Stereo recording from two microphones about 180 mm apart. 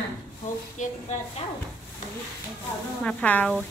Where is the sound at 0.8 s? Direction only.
45° left (ahead or behind).